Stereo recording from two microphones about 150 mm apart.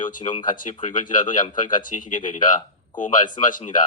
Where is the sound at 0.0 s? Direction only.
60° left (ahead or behind).